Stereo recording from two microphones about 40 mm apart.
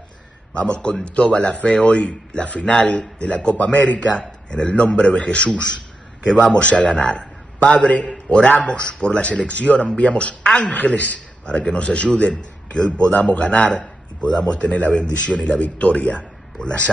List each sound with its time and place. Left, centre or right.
0.6 s a man's voice: left
11.4 s a man's voice: left